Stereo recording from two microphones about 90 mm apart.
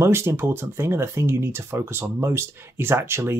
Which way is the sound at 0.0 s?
30° right (ahead or behind).